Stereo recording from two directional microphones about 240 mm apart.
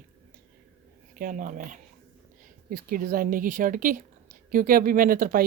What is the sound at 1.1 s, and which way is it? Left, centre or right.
Speech, right.